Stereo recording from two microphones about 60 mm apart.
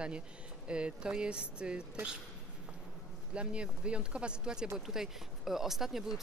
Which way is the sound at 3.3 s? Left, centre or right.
Centre.